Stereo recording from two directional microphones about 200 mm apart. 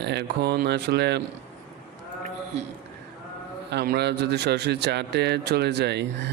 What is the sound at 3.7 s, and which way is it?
A man's voice, 55° right (ahead or behind).